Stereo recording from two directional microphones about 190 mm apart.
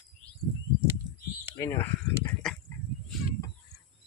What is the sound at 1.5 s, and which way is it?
Speech, 15° left (ahead or behind).